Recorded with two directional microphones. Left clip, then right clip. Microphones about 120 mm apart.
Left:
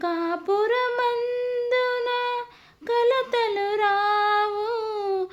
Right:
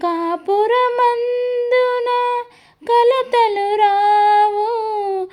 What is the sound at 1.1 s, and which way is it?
Humming, 10° right (ahead or behind).